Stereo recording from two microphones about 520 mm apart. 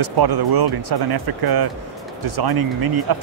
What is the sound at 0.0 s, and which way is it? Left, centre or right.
Speech, right.